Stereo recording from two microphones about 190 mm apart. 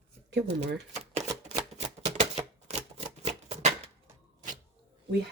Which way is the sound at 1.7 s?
35° right (ahead or behind).